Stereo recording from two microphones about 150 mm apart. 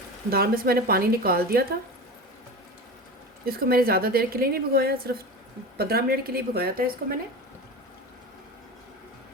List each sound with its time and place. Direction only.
0.3 s a woman's voice: 90° right
3.4 s a woman's voice: 85° right